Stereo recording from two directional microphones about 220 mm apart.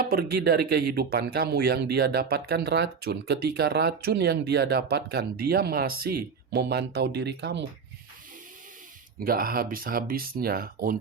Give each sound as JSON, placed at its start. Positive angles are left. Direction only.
{"t": 0.0, "sound": "speech", "side_deg": -45}
{"t": 9.2, "sound": "speech", "side_deg": -40}